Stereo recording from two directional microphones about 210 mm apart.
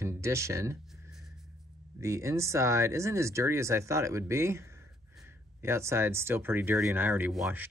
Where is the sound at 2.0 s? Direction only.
15° right (ahead or behind).